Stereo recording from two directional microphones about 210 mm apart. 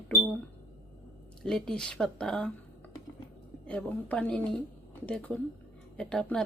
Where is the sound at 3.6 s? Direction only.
5° left (ahead or behind).